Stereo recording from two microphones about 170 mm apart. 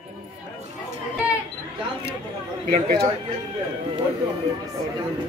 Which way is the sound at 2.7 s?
65° right (ahead or behind).